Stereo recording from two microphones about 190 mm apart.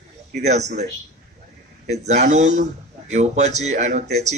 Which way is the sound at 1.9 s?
35° right (ahead or behind).